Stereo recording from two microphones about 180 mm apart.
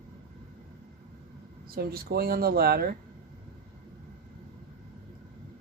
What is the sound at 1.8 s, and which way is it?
Speech, 60° right (ahead or behind).